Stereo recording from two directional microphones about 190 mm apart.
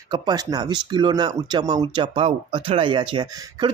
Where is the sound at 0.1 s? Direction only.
20° right (ahead or behind).